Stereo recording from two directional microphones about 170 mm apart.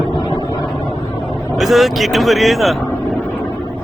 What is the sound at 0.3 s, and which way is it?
Vehicle, 25° left (ahead or behind).